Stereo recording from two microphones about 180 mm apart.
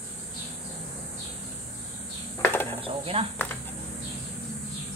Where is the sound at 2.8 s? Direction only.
30° right (ahead or behind).